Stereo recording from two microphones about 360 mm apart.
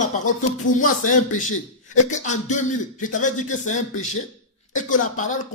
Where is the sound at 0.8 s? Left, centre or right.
Left.